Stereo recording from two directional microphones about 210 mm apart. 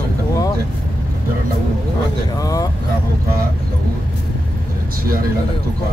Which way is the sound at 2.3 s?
15° left (ahead or behind).